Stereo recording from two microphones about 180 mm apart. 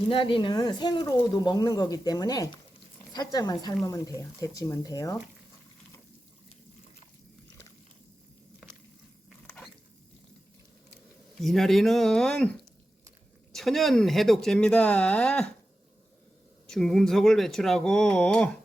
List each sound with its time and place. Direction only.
0.1 s speech: 30° left (ahead or behind)
10.9 s speech: centre (ahead or behind)
16.6 s speech: centre (ahead or behind)